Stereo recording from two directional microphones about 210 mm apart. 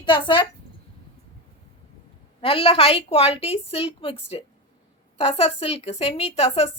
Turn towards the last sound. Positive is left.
turn(degrees=30)  # may be behind; listen again after turning